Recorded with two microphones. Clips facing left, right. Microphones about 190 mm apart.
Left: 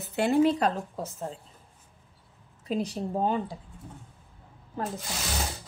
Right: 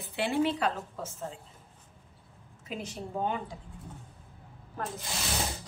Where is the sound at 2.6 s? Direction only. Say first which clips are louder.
Left 8 dB; 35° left (ahead or behind).